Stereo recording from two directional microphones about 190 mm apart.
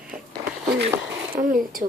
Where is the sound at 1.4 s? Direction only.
50° right (ahead or behind).